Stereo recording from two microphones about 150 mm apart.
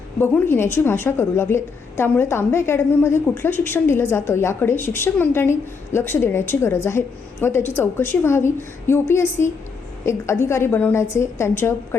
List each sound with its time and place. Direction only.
0.2 s a woman's voice: 15° left (ahead or behind)